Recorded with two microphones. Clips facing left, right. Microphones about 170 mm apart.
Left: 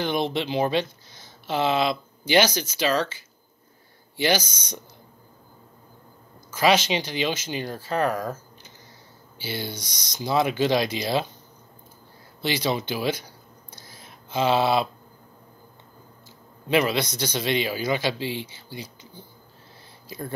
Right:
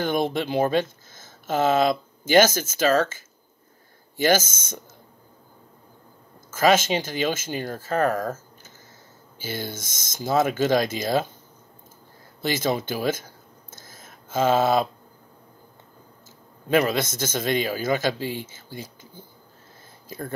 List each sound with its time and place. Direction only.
0.0 s speech: 50° right (ahead or behind)
6.5 s speech: 50° right (ahead or behind)
12.4 s a sound: 45° right (ahead or behind)
16.6 s speech: 45° right (ahead or behind)